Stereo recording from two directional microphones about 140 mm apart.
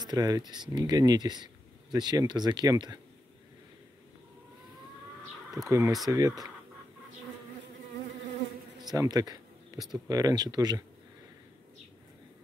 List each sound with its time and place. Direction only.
0.0 s speech: 30° right (ahead or behind)
5.7 s speech: 20° right (ahead or behind)
8.8 s speech: 25° right (ahead or behind)